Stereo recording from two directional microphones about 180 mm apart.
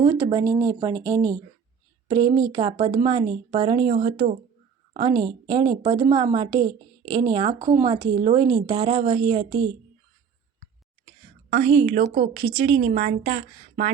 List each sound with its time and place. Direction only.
0.0 s a woman's voice: 20° right (ahead or behind)
12.1 s a woman's voice: 60° right (ahead or behind)
12.4 s a woman's voice: 30° right (ahead or behind)
12.9 s a woman's voice: 55° right (ahead or behind)